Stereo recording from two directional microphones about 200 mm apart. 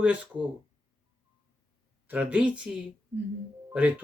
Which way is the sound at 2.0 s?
5° right (ahead or behind).